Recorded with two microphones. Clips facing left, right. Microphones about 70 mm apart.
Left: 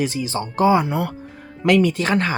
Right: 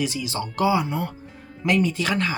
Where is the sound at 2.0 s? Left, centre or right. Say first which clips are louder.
Left 4 dB; left.